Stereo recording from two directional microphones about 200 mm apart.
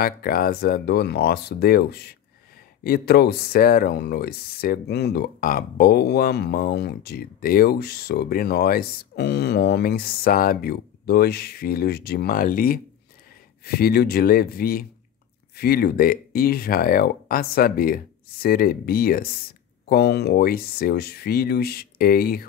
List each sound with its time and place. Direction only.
0.0 s speech: 45° left (ahead or behind)